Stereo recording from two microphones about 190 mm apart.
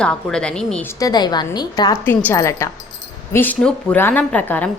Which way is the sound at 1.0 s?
20° left (ahead or behind).